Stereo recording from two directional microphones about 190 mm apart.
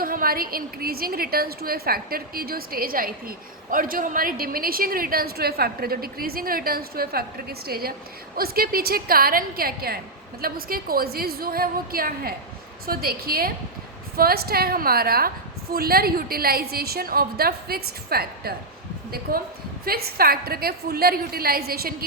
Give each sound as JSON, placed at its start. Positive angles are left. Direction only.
{"t": 0.0, "sound": "a woman's voice", "side_deg": -50}
{"t": 19.8, "sound": "a woman's voice", "side_deg": -50}